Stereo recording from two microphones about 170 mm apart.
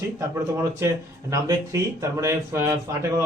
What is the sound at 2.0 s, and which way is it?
Speech, 15° right (ahead or behind).